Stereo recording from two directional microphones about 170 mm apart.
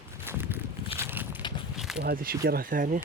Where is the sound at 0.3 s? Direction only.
15° right (ahead or behind).